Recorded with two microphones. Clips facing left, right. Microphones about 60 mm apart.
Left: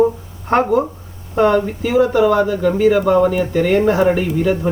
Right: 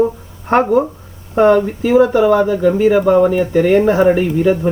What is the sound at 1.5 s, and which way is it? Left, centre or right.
Speech, right.